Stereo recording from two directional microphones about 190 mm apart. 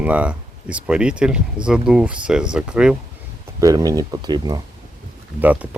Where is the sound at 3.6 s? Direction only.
20° right (ahead or behind).